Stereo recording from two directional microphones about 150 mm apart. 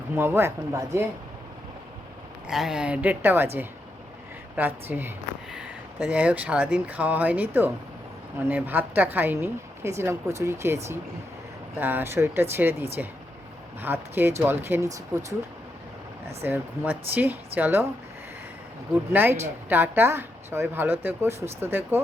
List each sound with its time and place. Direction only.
0.2 s speech: 15° right (ahead or behind)
2.5 s speech: 5° right (ahead or behind)
11.8 s speech: 15° right (ahead or behind)
16.4 s speech: 10° right (ahead or behind)
19.1 s speech: 15° right (ahead or behind)